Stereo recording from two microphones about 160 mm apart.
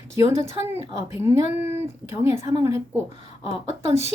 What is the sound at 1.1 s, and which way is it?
A woman's voice, 15° right (ahead or behind).